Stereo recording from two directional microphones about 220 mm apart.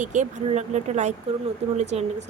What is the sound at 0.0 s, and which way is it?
Speech, 35° right (ahead or behind).